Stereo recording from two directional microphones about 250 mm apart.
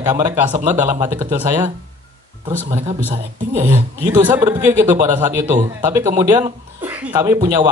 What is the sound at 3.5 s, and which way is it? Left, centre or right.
Speech, centre.